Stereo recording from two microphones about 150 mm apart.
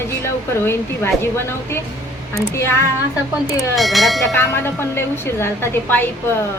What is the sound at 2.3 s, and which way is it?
Music, 20° left (ahead or behind).